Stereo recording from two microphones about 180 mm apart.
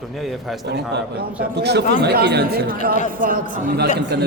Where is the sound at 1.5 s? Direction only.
70° right (ahead or behind).